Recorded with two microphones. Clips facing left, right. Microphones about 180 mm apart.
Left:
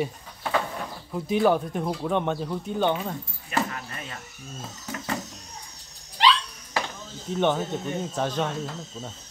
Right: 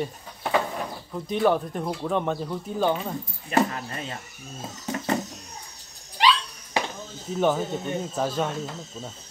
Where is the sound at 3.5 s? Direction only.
30° right (ahead or behind).